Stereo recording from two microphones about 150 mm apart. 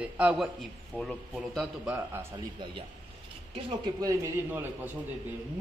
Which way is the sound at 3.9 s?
25° right (ahead or behind).